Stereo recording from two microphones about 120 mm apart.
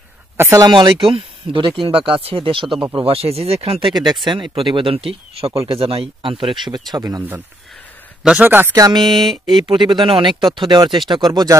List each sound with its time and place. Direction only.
0.4 s speech: 20° right (ahead or behind)
0.7 s speech: 40° right (ahead or behind); by 3.8 s 55° right (ahead or behind)
3.8 s speech: 40° right (ahead or behind)
6.9 s speech: 30° right (ahead or behind)
8.2 s speech: 10° right (ahead or behind)
8.7 s speech: 30° right (ahead or behind)
9.0 s speech: centre (ahead or behind)
9.7 s speech: 40° right (ahead or behind)